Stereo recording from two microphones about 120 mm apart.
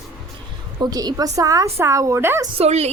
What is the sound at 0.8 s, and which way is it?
A woman's voice, 30° right (ahead or behind).